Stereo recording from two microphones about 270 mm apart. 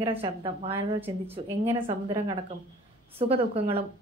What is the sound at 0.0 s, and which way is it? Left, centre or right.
A woman's voice, centre.